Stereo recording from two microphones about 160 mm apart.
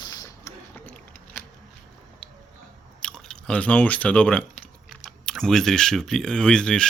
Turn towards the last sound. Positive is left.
turn(degrees=5)  # may be behind; listen again after turning